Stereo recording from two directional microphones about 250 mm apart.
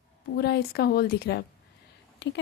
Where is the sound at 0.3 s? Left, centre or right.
Left.